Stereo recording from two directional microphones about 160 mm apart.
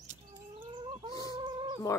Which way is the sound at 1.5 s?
30° right (ahead or behind).